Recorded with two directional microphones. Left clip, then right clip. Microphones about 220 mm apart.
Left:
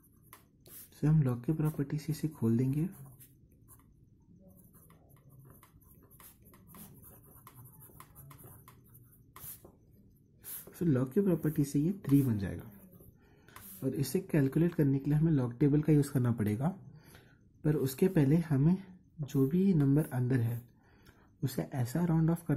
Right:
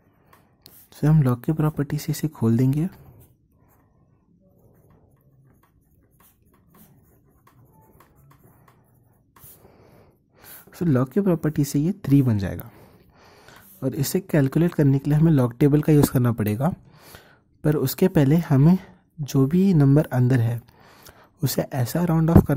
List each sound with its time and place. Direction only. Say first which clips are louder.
0.8 s speech: right 11 dB; 40° right (ahead or behind)
10.7 s speech: right 9 dB; 40° right (ahead or behind)